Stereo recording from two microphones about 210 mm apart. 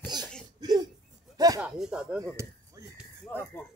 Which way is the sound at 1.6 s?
Centre (ahead or behind).